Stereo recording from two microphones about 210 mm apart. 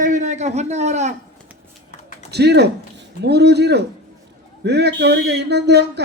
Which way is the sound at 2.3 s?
50° right (ahead or behind).